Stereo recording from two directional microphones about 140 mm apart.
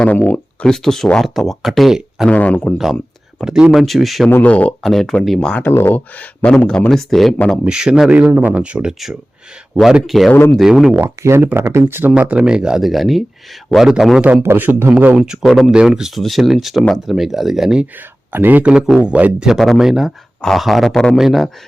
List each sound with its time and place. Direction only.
0.0 s speech: 10° left (ahead or behind)
2.3 s speech: 10° left (ahead or behind)
2.7 s speech: centre (ahead or behind)
4.3 s speech: 10° left (ahead or behind)
7.6 s speech: 5° right (ahead or behind)
10.3 s speech: 15° left (ahead or behind)
10.6 s speech: 5° right (ahead or behind)
11.0 s speech: 20° right (ahead or behind); by 17.8 s 5° right (ahead or behind)
18.3 s speech: 15° right (ahead or behind)